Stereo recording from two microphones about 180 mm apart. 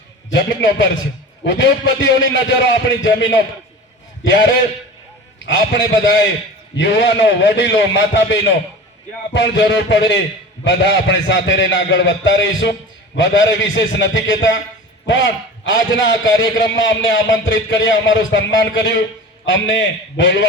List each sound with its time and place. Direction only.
0.3 s a sound: 90° left
1.5 s a man's voice: 90° left
5.5 s a man's voice: 90° left